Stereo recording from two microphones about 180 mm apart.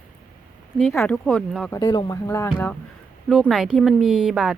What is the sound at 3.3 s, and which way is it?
Speech, 5° right (ahead or behind).